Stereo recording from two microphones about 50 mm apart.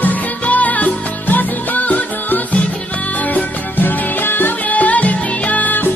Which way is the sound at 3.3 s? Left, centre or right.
Left.